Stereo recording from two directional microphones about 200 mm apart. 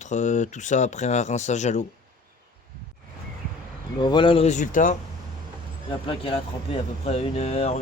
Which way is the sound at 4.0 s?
25° left (ahead or behind).